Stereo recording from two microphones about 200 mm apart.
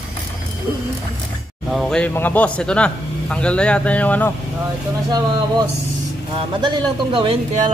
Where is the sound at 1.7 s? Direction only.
Centre (ahead or behind).